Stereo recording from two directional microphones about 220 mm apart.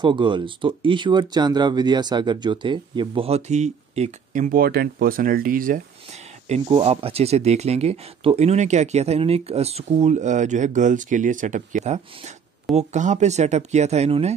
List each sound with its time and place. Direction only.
0.0 s speech: 20° right (ahead or behind); by 5.8 s 40° right (ahead or behind)
6.6 s speech: 25° right (ahead or behind)